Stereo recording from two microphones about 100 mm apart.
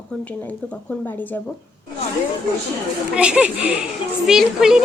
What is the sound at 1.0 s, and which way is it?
Speech, 20° left (ahead or behind).